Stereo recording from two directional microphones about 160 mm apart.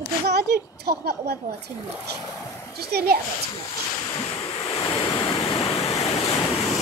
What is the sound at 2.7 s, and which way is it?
Speech, 80° right.